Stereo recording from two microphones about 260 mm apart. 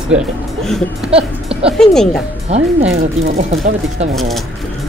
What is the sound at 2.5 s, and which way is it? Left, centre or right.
Speech, right.